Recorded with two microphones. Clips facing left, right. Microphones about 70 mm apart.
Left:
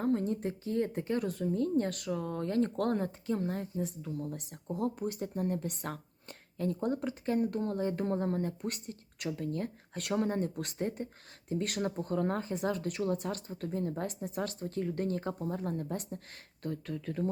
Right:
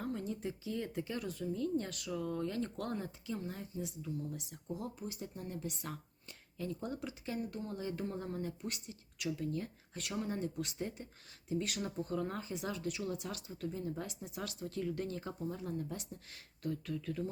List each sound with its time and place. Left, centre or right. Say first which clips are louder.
0.0 s a woman's voice: left 8 dB; left